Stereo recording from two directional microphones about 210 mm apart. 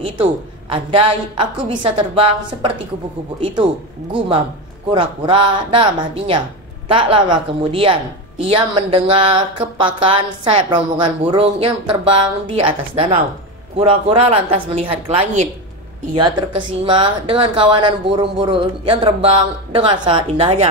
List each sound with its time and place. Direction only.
0.0 s a woman's voice: 25° right (ahead or behind)
4.9 s a woman's voice: 25° right (ahead or behind)